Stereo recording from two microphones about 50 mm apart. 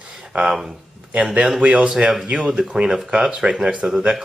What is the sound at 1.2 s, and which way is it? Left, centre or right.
Speech, centre.